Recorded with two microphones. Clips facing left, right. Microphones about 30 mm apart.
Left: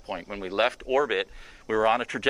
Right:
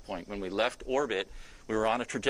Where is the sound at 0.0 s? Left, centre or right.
Left.